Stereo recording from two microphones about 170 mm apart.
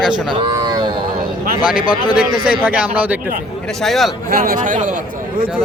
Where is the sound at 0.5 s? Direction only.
25° right (ahead or behind).